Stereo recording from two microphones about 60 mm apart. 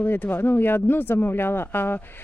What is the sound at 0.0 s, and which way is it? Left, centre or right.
Speech, left.